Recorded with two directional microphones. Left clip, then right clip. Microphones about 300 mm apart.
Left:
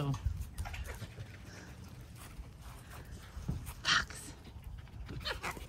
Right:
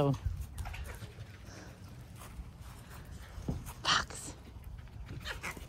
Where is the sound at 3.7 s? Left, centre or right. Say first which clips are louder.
Even; centre.